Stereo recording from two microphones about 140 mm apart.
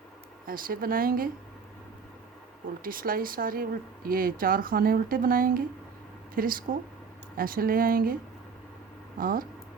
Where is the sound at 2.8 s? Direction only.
90° right.